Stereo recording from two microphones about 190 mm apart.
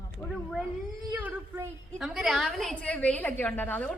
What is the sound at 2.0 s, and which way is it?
A woman's voice, centre (ahead or behind).